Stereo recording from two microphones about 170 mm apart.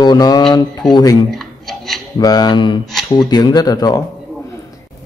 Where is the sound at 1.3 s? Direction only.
Centre (ahead or behind).